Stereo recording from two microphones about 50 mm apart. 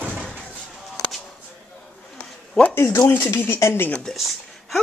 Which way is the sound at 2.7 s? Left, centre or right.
Left.